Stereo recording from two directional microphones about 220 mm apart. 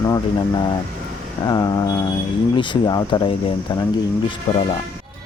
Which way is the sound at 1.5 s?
15° left (ahead or behind).